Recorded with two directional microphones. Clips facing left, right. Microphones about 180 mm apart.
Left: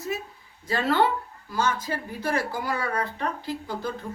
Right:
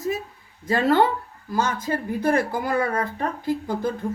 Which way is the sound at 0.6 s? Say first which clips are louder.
Right 4 dB; 50° right (ahead or behind).